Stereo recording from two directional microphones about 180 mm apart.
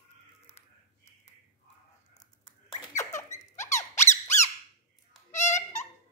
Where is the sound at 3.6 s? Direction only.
15° left (ahead or behind).